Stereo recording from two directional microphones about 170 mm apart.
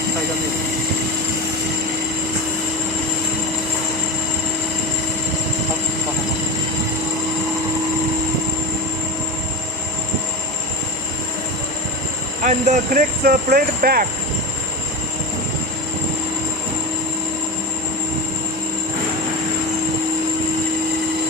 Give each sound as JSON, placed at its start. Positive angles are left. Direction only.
{"t": 12.4, "sound": "speech", "side_deg": -45}